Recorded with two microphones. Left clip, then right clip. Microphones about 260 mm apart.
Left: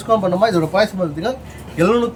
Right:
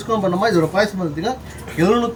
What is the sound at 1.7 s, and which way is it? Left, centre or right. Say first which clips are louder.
Speech: left 1 dB; centre.